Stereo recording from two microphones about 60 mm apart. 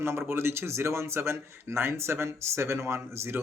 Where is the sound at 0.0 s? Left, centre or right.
Right.